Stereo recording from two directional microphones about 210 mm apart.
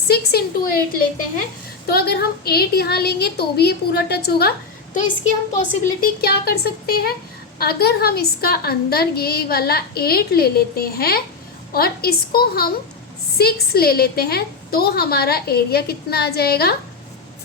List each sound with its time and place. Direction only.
0.1 s a woman's voice: 50° left (ahead or behind)
5.5 s a woman's voice: 45° left (ahead or behind)